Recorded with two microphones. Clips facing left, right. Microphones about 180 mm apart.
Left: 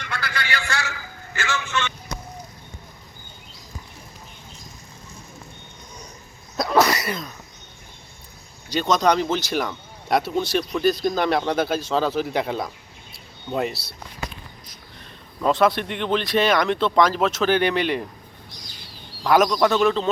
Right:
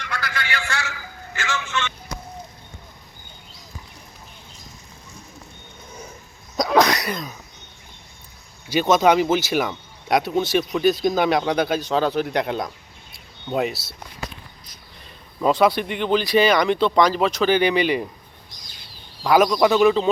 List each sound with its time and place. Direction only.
0.0 s a sound: 30° left (ahead or behind)
1.4 s speech: 45° left (ahead or behind)
6.6 s sneeze: 5° left (ahead or behind)
8.7 s speech: 5° right (ahead or behind)
15.4 s speech: 5° right (ahead or behind)
19.2 s speech: centre (ahead or behind)